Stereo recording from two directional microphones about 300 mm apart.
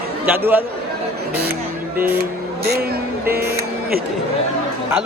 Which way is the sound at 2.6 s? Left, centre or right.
Right.